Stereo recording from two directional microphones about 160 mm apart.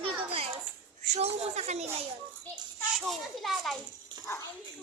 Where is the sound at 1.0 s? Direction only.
45° right (ahead or behind).